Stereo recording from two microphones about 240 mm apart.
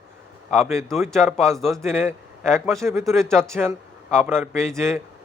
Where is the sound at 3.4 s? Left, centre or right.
Centre.